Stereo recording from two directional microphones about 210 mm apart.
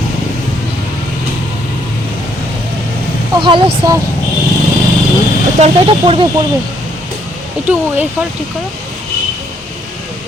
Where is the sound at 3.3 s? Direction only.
25° right (ahead or behind).